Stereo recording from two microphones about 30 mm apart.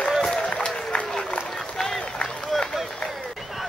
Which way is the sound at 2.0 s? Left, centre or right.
Left.